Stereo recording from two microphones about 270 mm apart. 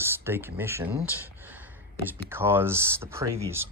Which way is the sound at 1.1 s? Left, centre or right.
Centre.